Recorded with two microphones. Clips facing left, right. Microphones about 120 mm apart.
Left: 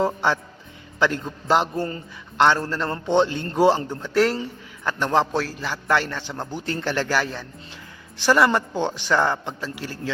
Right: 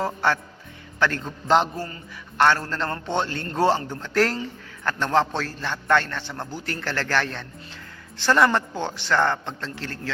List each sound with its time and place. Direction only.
0.0 s music: 15° left (ahead or behind)
0.9 s a man's voice: 15° left (ahead or behind)
1.7 s a man's voice: 25° left (ahead or behind)
2.6 s a man's voice: 5° left (ahead or behind)
2.9 s a man's voice: 20° left (ahead or behind)
4.9 s a man's voice: 15° left (ahead or behind)
8.4 s a man's voice: 15° left (ahead or behind)